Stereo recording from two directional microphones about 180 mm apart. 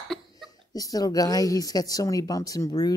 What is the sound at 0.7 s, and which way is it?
Speech, 20° left (ahead or behind).